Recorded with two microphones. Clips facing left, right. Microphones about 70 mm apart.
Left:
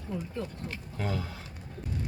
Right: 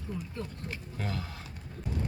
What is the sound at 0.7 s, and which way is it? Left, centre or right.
Speech, centre.